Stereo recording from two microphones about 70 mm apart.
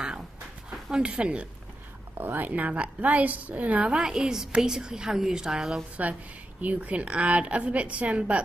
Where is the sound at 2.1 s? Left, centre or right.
Right; by 5.8 s centre.